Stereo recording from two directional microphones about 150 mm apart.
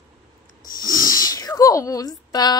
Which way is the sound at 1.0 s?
25° left (ahead or behind).